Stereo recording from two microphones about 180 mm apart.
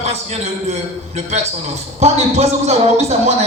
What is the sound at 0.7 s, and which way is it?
Speech, 35° right (ahead or behind).